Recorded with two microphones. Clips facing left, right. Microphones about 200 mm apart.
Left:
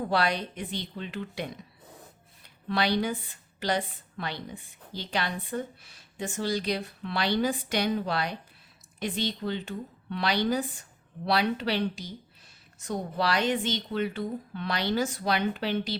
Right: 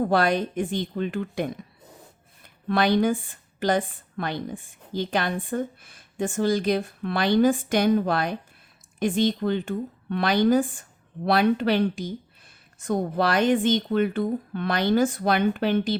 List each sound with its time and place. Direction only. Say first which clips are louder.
0.0 s a woman's voice: right 6 dB; 50° right (ahead or behind)